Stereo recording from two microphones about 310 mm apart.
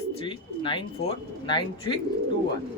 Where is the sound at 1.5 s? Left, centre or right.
Centre.